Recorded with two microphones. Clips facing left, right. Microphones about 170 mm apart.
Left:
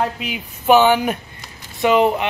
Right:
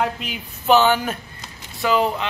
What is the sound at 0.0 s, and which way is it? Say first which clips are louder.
A man's voice: left 2 dB; 5° left (ahead or behind).